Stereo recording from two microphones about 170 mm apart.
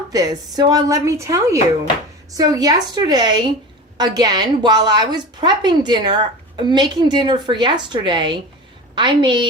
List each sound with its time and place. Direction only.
0.1 s a woman's voice: 20° right (ahead or behind)